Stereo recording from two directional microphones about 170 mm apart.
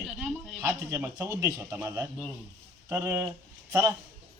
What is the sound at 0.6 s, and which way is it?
Speech, 15° right (ahead or behind).